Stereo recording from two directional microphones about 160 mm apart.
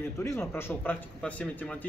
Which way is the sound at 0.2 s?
15° left (ahead or behind).